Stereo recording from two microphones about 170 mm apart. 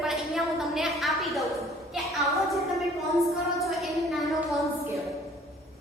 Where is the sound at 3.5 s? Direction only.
Centre (ahead or behind).